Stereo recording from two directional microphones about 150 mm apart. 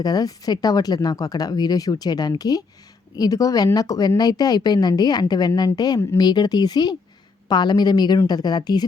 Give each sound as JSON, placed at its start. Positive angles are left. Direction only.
{"t": 0.0, "sound": "speech", "side_deg": 25}